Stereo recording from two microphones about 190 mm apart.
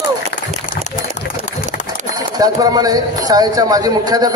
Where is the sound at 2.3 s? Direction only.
20° right (ahead or behind).